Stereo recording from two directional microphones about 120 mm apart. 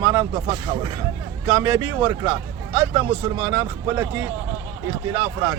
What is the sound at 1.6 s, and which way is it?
Speech, 30° right (ahead or behind).